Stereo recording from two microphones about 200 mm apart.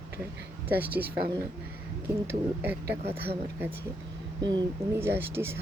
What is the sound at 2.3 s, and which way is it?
Speech, 10° right (ahead or behind).